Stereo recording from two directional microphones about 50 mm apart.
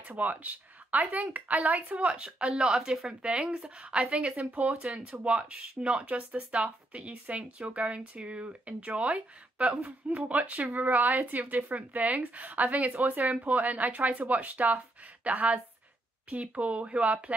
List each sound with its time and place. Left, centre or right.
0.2 s speech: right
4.8 s a woman's voice: centre